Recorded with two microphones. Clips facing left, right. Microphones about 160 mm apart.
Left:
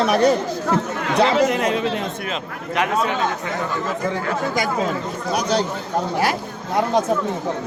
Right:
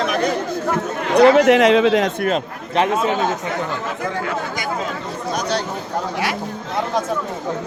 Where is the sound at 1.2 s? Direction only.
60° right (ahead or behind); by 2.1 s 90° right.